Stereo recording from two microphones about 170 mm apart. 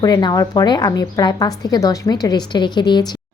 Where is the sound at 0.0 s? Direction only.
25° left (ahead or behind).